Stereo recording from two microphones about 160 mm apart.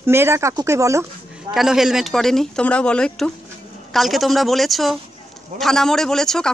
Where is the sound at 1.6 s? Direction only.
5° right (ahead or behind).